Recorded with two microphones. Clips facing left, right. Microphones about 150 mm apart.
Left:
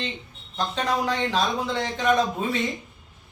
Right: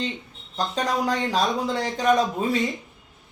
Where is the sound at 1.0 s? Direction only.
40° right (ahead or behind).